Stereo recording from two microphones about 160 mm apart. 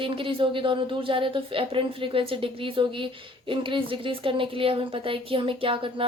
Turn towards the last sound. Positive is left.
turn(degrees=-35)  # may be behind; listen again after turning